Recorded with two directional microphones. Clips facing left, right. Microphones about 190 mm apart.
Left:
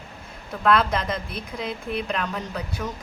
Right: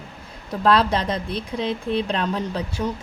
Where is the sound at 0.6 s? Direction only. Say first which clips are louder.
Right 2 dB; 30° right (ahead or behind).